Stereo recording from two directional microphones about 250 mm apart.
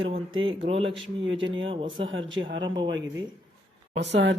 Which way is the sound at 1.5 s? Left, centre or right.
Centre.